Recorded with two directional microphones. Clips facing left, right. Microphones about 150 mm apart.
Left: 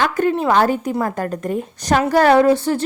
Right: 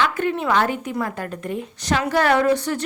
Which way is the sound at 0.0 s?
40° left (ahead or behind).